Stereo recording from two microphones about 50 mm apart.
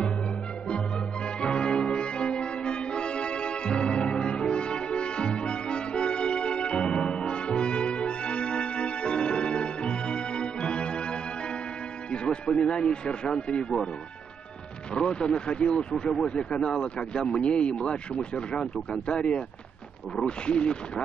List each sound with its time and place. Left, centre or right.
1.4 s music: centre
12.1 s speech: centre
15.0 s speech: centre